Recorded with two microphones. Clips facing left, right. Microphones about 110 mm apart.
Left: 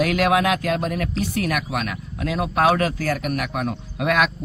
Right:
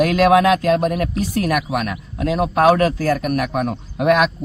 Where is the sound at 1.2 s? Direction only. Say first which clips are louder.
Right 3 dB; 30° right (ahead or behind).